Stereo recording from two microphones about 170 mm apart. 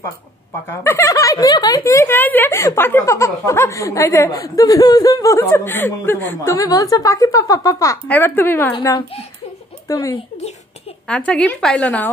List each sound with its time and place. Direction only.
0.8 s speech: 20° left (ahead or behind)
8.7 s speech: 25° left (ahead or behind)
11.1 s speech: 5° left (ahead or behind)